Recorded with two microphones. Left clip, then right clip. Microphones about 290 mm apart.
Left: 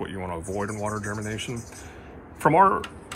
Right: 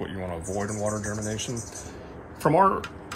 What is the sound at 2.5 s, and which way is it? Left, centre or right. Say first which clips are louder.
Speech: left 2 dB; centre.